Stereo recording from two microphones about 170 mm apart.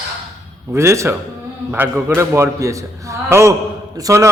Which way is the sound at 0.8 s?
15° right (ahead or behind).